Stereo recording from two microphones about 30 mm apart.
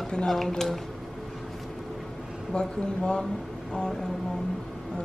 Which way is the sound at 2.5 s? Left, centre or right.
Left.